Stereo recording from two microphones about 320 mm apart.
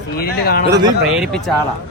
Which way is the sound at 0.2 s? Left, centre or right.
Left.